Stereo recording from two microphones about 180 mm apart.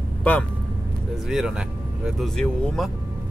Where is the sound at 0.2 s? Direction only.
10° left (ahead or behind).